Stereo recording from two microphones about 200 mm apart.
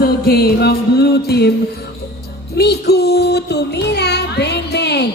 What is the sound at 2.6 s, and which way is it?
Child singing, 55° left (ahead or behind).